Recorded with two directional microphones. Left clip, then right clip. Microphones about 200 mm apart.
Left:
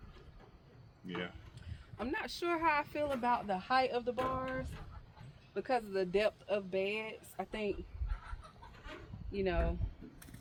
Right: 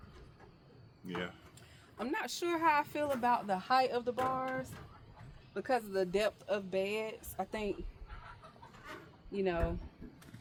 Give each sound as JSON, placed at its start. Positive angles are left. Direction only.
{"t": 1.0, "sound": "music", "side_deg": -25}
{"t": 2.0, "sound": "speech", "side_deg": -40}
{"t": 4.1, "sound": "music", "side_deg": -20}
{"t": 5.5, "sound": "speech", "side_deg": -30}
{"t": 8.1, "sound": "a sound", "side_deg": 55}
{"t": 9.3, "sound": "music", "side_deg": -20}